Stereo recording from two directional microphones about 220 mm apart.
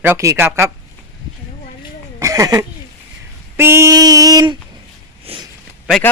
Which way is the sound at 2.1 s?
15° right (ahead or behind).